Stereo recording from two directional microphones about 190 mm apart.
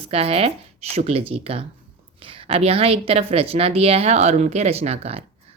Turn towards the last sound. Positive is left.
turn(degrees=-35)  # may be behind; listen again after turning